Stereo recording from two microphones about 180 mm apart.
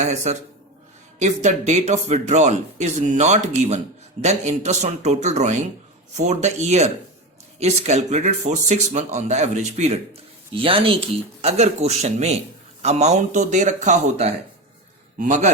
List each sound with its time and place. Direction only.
0.0 s speech: 40° right (ahead or behind)
10.5 s speech: 30° right (ahead or behind)